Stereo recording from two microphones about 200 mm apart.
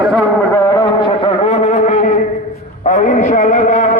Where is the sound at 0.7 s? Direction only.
25° left (ahead or behind).